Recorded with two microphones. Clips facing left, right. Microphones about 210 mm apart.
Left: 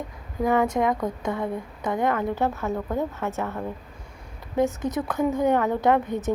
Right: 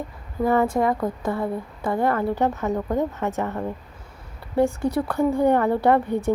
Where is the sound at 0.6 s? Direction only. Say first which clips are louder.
Right 2 dB; 5° right (ahead or behind).